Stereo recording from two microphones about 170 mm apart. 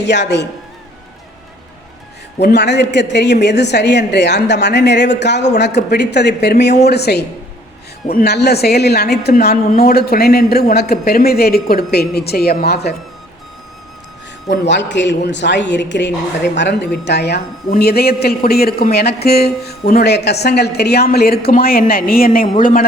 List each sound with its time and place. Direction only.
0.0 s a woman's voice: 90° left
2.4 s a woman's voice: 75° left (ahead or behind)
14.6 s a woman's voice: 90° left
17.1 s a woman's voice: 75° left (ahead or behind)
17.7 s a woman's voice: 65° left (ahead or behind)